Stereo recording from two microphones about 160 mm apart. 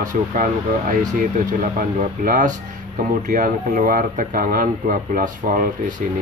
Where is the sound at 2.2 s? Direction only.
55° right (ahead or behind).